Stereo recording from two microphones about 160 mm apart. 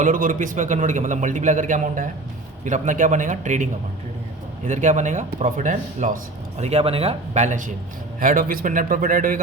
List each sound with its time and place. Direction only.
0.0 s a man's voice: 55° right (ahead or behind)
8.2 s a man's voice: 60° right (ahead or behind)